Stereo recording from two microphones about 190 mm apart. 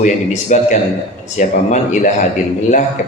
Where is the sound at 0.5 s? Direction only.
40° left (ahead or behind).